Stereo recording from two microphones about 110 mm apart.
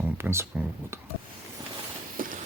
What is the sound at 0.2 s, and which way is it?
Speech, 25° right (ahead or behind).